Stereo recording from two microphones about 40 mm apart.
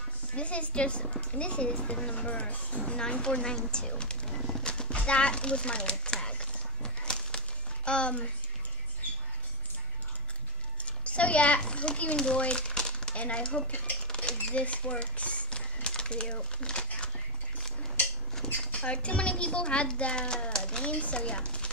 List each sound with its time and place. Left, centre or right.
0.3 s a woman's voice: left
2.8 s a child's voice: left
4.3 s bird: centre
4.6 s a sound: left
10.9 s a child's voice: left
12.2 s a sound: left
13.2 s a child's voice: left
14.1 s a sound: left
16.3 s crumpling: left
18.7 s a child's voice: left